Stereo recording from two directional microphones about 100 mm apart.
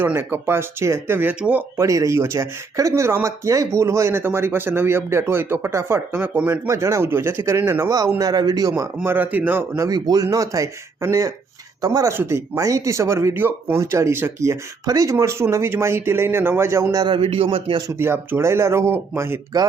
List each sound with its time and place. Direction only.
0.0 s speech: 20° right (ahead or behind)
1.8 s speech: 30° right (ahead or behind)
6.7 s speech: 30° right (ahead or behind)
7.9 s speech: 35° right (ahead or behind)
9.0 s speech: 20° right (ahead or behind)
9.8 s speech: 40° right (ahead or behind)
12.1 s speech: 25° right (ahead or behind)
13.3 s speech: 20° right (ahead or behind)
16.9 s speech: 45° right (ahead or behind)
17.2 s speech: 70° right (ahead or behind)
18.0 s speech: 25° right (ahead or behind)